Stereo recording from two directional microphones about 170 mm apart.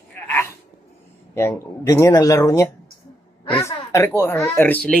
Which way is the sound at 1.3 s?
15° left (ahead or behind).